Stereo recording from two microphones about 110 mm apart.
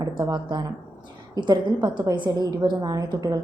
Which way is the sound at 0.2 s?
40° right (ahead or behind).